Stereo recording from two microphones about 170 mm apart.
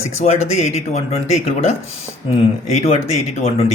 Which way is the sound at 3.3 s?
35° left (ahead or behind).